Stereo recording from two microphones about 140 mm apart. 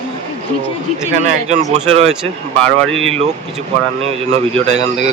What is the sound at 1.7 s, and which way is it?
Speech, 50° right (ahead or behind).